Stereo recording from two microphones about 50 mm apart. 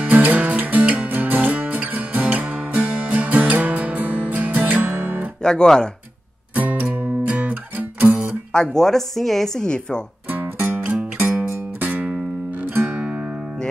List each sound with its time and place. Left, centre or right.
0.0 s music: right
5.4 s speech: centre
6.5 s music: right
7.7 s music: right
8.5 s speech: centre
9.7 s speech: centre
10.3 s music: right